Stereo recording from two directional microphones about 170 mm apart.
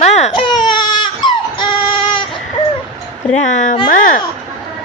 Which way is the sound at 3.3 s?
45° left (ahead or behind).